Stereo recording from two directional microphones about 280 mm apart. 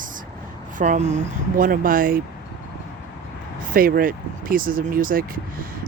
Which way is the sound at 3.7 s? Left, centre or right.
Right.